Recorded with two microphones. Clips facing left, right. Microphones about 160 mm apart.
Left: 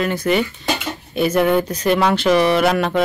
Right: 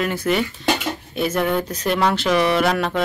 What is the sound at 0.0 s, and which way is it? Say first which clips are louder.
Speech: left 2 dB; 5° right (ahead or behind).